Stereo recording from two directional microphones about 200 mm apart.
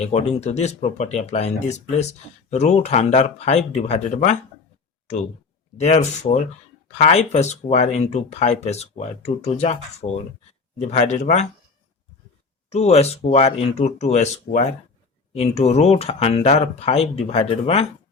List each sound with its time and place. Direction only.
0.0 s speech: 30° left (ahead or behind)
5.8 s speech: 35° left (ahead or behind)
12.7 s speech: 30° left (ahead or behind)